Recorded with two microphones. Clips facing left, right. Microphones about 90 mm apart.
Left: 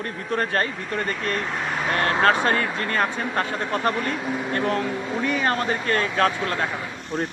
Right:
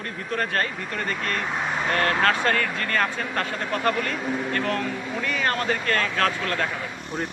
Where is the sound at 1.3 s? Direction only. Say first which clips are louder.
Even; centre (ahead or behind).